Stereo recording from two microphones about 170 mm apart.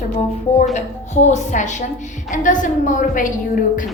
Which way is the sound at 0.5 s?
45° left (ahead or behind).